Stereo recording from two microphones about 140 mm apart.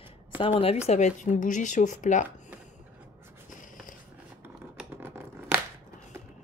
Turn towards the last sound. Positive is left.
turn(degrees=-15)  # may be behind; listen again after turning